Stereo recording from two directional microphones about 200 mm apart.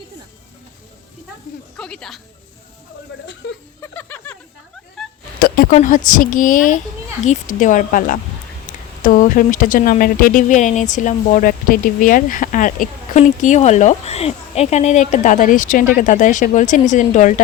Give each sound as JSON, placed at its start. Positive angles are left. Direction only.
{"t": 1.7, "sound": "speech", "side_deg": 5}
{"t": 3.4, "sound": "speech", "side_deg": 60}
{"t": 3.8, "sound": "a sound", "side_deg": 10}
{"t": 5.0, "sound": "cat", "side_deg": 0}
{"t": 5.4, "sound": "speech", "side_deg": 45}